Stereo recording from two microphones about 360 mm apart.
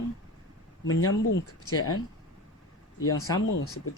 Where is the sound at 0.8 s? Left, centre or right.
Left.